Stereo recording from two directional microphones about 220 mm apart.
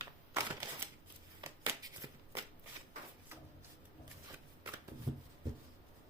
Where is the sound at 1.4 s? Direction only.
15° right (ahead or behind).